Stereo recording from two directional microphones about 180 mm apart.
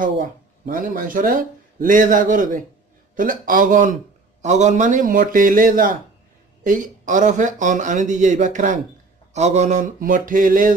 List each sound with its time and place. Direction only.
0.0 s a man's voice: 50° right (ahead or behind)